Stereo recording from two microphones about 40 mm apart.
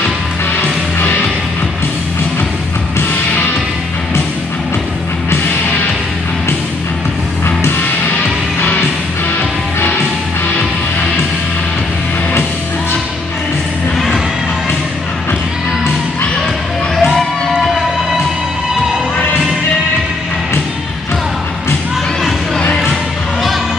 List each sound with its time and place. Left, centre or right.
7.4 s music: left
8.5 s music: left
17.0 s music: centre